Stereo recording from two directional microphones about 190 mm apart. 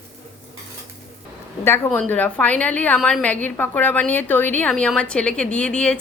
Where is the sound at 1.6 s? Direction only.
10° left (ahead or behind).